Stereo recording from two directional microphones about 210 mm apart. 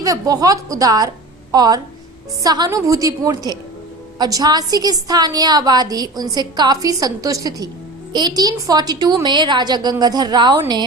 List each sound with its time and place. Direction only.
0.0 s a woman's voice: 15° right (ahead or behind)